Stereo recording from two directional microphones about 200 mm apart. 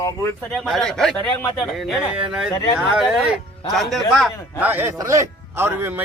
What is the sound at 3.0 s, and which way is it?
Speech, 5° right (ahead or behind).